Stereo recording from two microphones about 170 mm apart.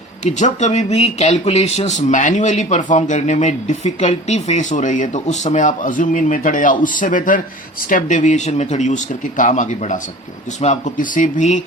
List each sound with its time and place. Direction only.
0.3 s speech: 45° left (ahead or behind)